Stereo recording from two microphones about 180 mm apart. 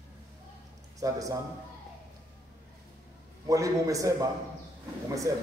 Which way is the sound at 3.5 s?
20° right (ahead or behind).